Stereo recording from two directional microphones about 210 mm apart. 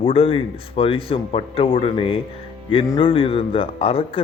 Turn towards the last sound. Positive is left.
turn(degrees=25)  # may be behind; listen again after turning